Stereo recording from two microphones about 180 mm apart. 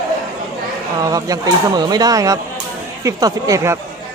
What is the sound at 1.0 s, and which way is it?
Speech, 20° right (ahead or behind).